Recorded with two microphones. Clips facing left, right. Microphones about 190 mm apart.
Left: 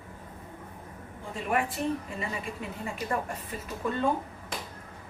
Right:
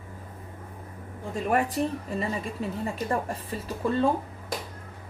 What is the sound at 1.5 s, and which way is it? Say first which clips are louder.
Speech: right 2 dB; 40° right (ahead or behind).